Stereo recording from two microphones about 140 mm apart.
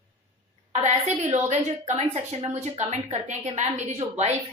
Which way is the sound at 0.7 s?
55° right (ahead or behind).